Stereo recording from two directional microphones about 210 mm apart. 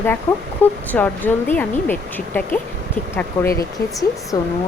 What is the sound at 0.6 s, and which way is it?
Speech, 10° left (ahead or behind).